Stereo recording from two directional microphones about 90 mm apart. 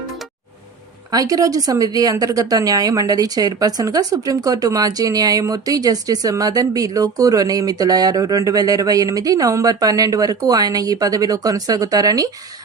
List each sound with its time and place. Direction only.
1.1 s a woman's voice: 40° right (ahead or behind)